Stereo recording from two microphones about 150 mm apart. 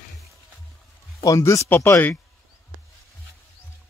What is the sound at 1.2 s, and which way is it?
Speech, 20° left (ahead or behind).